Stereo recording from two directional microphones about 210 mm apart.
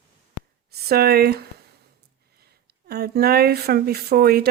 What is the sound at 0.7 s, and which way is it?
Speech, 50° right (ahead or behind).